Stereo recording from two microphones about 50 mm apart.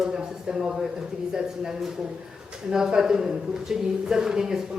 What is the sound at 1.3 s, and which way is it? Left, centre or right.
Speech, centre.